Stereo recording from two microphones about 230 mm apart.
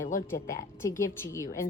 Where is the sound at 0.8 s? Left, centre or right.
Centre.